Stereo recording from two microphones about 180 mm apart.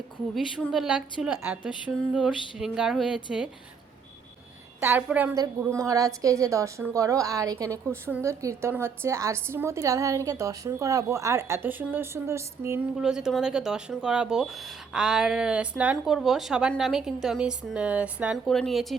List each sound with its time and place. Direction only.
0.3 s speech: centre (ahead or behind)
4.8 s a woman's voice: 5° right (ahead or behind)
13.0 s speech: 5° right (ahead or behind)